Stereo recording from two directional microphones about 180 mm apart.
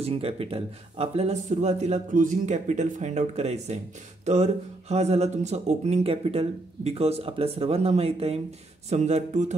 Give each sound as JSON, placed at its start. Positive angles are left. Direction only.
{"t": 0.0, "sound": "speech", "side_deg": -35}